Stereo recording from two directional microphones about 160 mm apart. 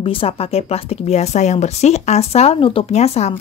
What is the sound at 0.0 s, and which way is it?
Speech, 35° left (ahead or behind).